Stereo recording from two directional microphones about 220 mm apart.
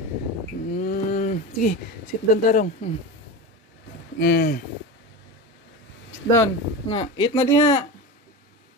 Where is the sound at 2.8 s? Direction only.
25° left (ahead or behind).